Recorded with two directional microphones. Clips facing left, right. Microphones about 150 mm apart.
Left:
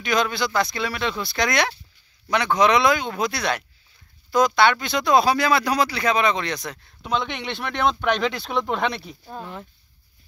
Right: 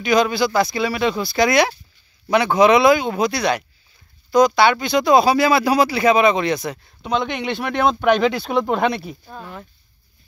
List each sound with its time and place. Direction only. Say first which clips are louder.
0.0 s speech: right 6 dB; 5° right (ahead or behind)
9.3 s speech: even; 20° left (ahead or behind)